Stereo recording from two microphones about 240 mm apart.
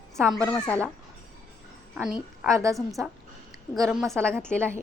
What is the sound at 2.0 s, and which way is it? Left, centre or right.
Speech, centre.